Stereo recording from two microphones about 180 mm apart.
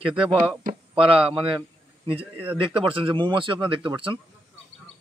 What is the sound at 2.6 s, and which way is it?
Speech, 30° right (ahead or behind).